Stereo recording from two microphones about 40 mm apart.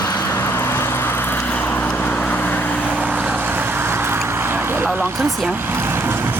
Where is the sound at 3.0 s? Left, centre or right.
Right.